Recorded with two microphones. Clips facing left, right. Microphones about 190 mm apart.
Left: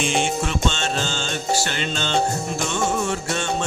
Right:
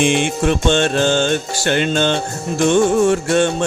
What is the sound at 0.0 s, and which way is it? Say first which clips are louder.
Music: right 7 dB; 60° right (ahead or behind).